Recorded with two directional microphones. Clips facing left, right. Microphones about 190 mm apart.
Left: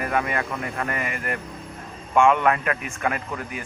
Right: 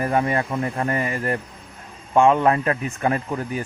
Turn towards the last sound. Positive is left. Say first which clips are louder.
# right 6 dB
turn(degrees=-30)  # may be behind; listen again after turning